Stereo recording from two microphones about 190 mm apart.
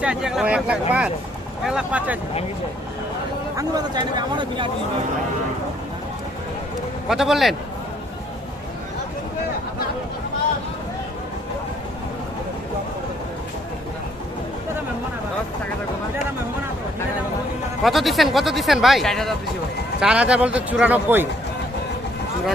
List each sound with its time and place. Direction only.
0.0 s a man's voice: 5° right (ahead or behind)
3.5 s speech: 20° right (ahead or behind)
7.1 s speech: centre (ahead or behind)
17.8 s a man's voice: centre (ahead or behind)